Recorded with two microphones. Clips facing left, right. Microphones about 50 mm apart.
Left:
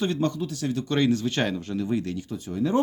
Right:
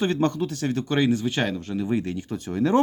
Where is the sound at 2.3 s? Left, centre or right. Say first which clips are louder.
Right 3 dB; right.